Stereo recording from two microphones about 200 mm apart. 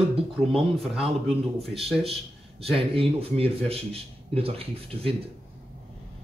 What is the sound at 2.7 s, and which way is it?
Speech, 30° right (ahead or behind).